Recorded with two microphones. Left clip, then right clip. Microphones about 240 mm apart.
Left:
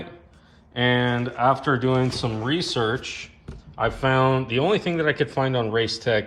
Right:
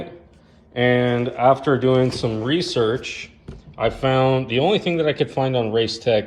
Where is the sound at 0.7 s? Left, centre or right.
Centre.